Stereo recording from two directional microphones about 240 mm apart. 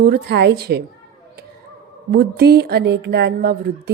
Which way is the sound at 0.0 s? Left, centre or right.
Right.